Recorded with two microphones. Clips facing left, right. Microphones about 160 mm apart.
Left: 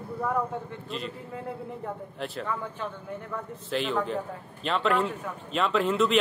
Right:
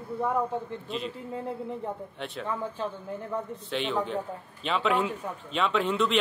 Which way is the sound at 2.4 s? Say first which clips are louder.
Right 1 dB; 30° right (ahead or behind).